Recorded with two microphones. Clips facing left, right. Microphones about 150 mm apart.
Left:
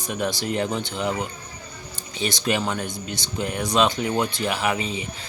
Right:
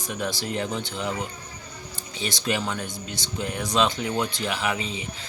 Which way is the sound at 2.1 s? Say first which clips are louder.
Left 3 dB; 65° left (ahead or behind).